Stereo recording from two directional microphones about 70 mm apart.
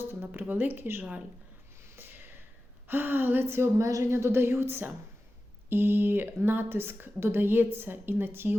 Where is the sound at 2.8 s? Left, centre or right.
Right.